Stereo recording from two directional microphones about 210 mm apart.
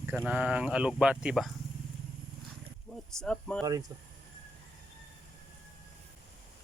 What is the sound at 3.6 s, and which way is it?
Speech, 20° right (ahead or behind).